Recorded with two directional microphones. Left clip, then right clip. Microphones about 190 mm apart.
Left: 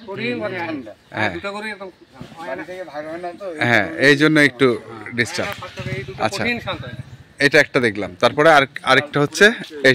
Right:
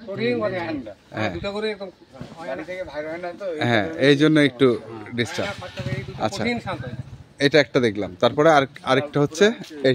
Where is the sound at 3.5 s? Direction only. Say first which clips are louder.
Left 5 dB; 5° right (ahead or behind).